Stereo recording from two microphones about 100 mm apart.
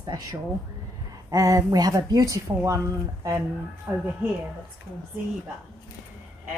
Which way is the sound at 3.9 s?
25° right (ahead or behind).